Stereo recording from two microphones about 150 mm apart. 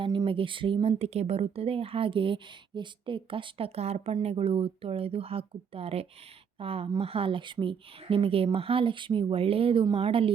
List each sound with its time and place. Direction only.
0.0 s speech: 35° right (ahead or behind)